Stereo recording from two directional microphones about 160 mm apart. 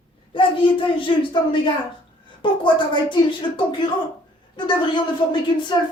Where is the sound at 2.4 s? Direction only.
30° left (ahead or behind).